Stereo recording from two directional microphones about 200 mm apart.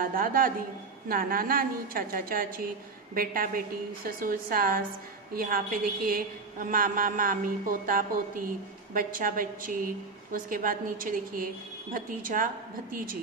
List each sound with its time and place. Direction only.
0.0 s a woman's voice: 45° right (ahead or behind)